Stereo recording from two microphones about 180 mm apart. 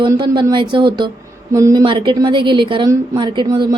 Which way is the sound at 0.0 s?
25° right (ahead or behind).